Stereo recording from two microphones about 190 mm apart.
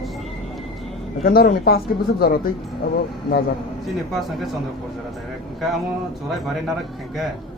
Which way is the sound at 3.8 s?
Centre (ahead or behind).